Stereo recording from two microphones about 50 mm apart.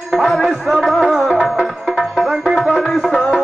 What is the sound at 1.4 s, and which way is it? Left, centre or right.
Music, centre.